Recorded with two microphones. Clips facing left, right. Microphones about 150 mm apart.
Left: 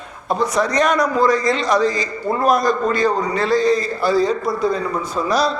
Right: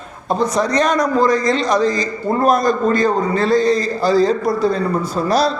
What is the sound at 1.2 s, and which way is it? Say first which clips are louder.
Speech: right 1 dB; 45° right (ahead or behind).